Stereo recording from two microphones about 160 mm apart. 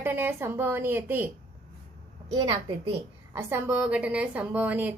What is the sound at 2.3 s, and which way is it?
Speech, 30° right (ahead or behind).